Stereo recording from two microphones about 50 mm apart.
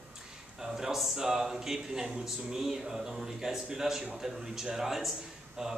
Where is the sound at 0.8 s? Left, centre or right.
Centre.